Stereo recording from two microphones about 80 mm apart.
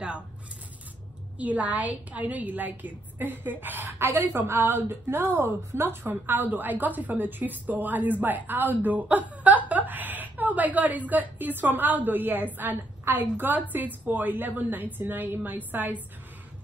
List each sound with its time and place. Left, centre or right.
1.4 s a woman's voice: centre